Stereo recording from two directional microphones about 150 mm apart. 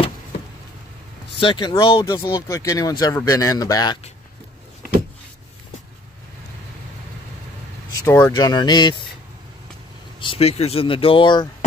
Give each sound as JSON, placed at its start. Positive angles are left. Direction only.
{"t": 1.4, "sound": "speech", "side_deg": 30}
{"t": 7.9, "sound": "vehicle", "side_deg": 15}
{"t": 8.3, "sound": "speech", "side_deg": 25}
{"t": 10.2, "sound": "speech", "side_deg": 40}